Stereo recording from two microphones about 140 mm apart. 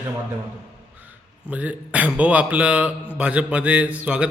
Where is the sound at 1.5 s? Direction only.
10° right (ahead or behind).